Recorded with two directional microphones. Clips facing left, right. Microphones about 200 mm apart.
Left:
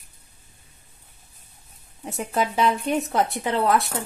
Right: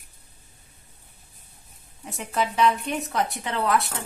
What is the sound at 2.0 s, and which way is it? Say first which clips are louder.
Speech: left 2 dB; 35° left (ahead or behind).